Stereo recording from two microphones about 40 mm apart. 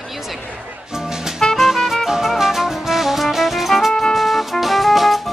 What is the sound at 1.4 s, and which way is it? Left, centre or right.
Music, centre.